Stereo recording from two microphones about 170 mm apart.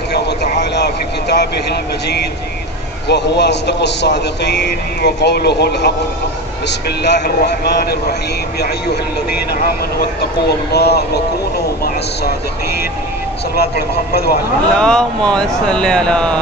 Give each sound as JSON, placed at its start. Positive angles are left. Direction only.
{"t": 0.1, "sound": "vehicle", "side_deg": 80}
{"t": 3.1, "sound": "a man's voice", "side_deg": 85}
{"t": 7.0, "sound": "a man's voice", "side_deg": 80}
{"t": 13.6, "sound": "a man's voice", "side_deg": 65}
{"t": 14.8, "sound": "speech", "side_deg": 5}